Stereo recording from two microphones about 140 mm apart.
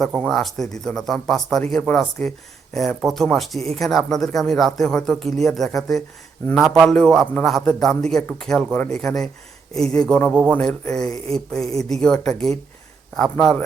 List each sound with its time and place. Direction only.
0.1 s speech: centre (ahead or behind)
10.3 s speech: 10° right (ahead or behind)
10.9 s speech: 5° left (ahead or behind)
11.6 s speech: 50° right (ahead or behind)
11.9 s speech: 5° left (ahead or behind)